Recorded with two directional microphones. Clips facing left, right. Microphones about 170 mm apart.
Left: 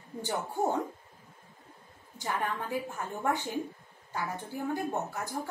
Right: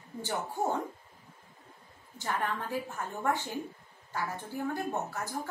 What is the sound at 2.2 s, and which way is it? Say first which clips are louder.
A woman's voice: even; 15° left (ahead or behind).